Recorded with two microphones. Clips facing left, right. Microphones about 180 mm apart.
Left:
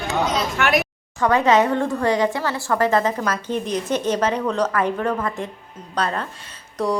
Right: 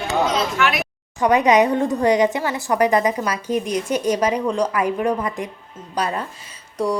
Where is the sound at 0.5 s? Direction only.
45° left (ahead or behind).